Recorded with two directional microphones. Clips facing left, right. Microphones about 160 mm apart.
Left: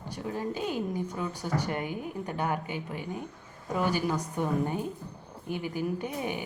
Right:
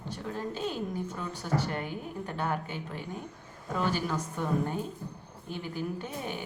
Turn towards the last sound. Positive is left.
turn(degrees=15)  # may be behind; listen again after turning